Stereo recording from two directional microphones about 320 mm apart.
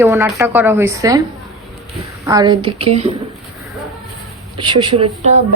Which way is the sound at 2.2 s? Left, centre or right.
Centre.